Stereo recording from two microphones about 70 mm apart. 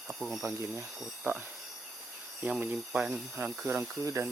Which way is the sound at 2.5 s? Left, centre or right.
Right.